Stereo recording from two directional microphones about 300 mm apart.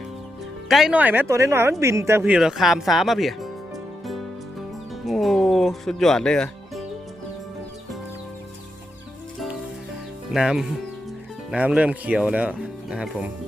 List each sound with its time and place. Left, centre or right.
0.7 s speech: centre
4.0 s music: centre
10.3 s speech: centre